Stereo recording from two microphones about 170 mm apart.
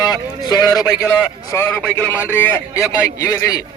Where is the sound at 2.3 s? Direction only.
15° left (ahead or behind).